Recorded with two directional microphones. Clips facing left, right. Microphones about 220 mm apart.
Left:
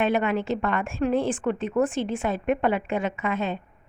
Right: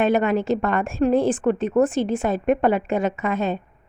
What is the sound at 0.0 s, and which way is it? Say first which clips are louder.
Speech: right 4 dB; 40° right (ahead or behind).